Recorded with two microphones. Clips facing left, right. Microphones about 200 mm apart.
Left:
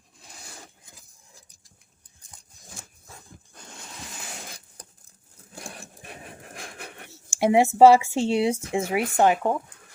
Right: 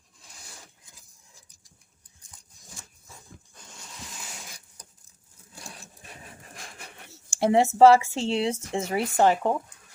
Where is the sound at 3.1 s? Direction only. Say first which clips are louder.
Left 2 dB; 60° left (ahead or behind).